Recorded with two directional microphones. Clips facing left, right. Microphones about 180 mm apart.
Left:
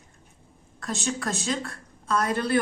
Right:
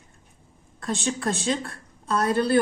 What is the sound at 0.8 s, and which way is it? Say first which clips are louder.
A woman's voice: right 3 dB; 30° right (ahead or behind).